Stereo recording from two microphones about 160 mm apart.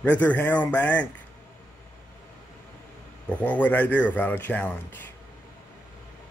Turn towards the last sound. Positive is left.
turn(degrees=10)  # may be behind; listen again after turning